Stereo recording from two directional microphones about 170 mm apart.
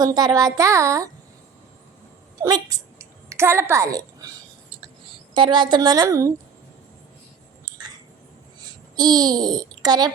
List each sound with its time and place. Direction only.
0.0 s a child's voice: 25° right (ahead or behind)
2.4 s a woman's voice: 20° right (ahead or behind)
5.3 s a child's voice: 30° right (ahead or behind)
7.6 s a sound: 25° right (ahead or behind)
9.0 s a child's voice: 25° right (ahead or behind)